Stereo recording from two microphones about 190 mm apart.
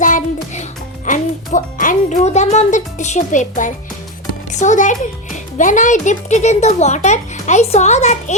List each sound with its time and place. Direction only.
0.0 s music: 45° left (ahead or behind)
1.0 s a woman's voice: 45° left (ahead or behind)